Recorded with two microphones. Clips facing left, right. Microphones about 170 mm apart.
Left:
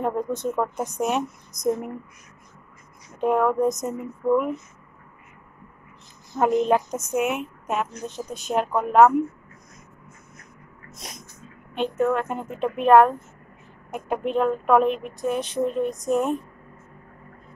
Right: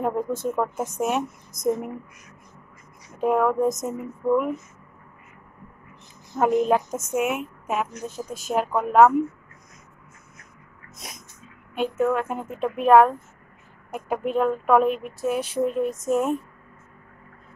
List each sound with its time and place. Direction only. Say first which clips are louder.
0.0 s a woman's voice: even; 5° right (ahead or behind)
3.2 s a woman's voice: even; 5° right (ahead or behind)
6.3 s a woman's voice: even; 5° right (ahead or behind)
11.0 s a sound: left 1 dB; centre (ahead or behind)
11.7 s a woman's voice: even; 5° right (ahead or behind)